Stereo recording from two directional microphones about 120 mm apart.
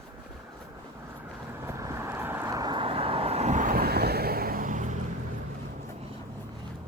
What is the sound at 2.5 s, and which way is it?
Vehicle, 35° right (ahead or behind).